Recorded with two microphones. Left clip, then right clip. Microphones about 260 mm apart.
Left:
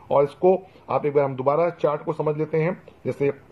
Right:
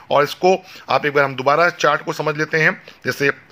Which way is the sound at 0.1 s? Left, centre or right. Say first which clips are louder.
Right 4 dB; right.